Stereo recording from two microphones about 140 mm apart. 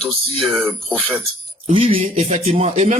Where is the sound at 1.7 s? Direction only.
45° right (ahead or behind).